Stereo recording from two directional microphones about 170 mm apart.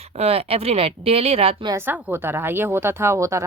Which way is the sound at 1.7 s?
10° right (ahead or behind).